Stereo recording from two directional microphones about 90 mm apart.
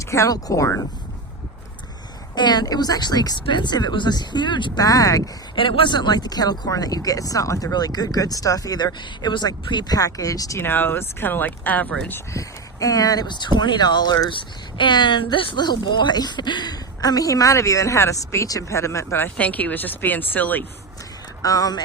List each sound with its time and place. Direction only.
0.0 s speech: 35° left (ahead or behind)
2.3 s speech: 50° left (ahead or behind)
3.4 s speech: 60° left (ahead or behind)
4.8 s speech: 40° left (ahead or behind)
5.5 s speech: 70° left (ahead or behind); by 10.6 s 40° left (ahead or behind)
10.6 s speech: 25° left (ahead or behind)
12.3 s speech: 40° left (ahead or behind)
19.4 s speech: 15° left (ahead or behind)
21.4 s speech: 45° left (ahead or behind)